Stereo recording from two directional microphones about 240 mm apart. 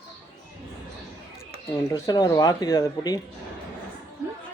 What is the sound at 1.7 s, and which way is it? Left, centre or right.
Speech, centre.